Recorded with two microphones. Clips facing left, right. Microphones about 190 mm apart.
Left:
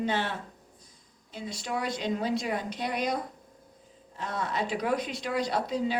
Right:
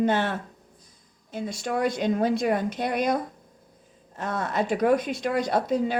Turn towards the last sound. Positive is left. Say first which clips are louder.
# right 5 dB
turn(degrees=-50)  # may be behind; listen again after turning